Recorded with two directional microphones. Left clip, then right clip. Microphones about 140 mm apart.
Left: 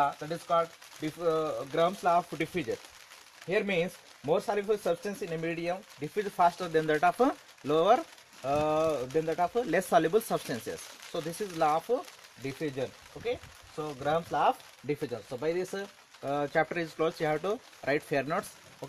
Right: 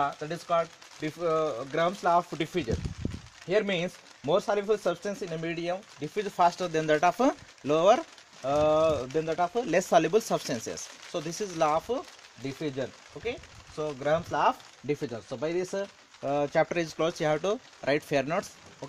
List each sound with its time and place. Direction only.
0.0 s speech: 25° right (ahead or behind)
13.2 s speech: 20° right (ahead or behind)